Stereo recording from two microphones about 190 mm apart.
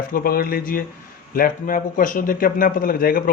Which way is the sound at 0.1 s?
50° left (ahead or behind).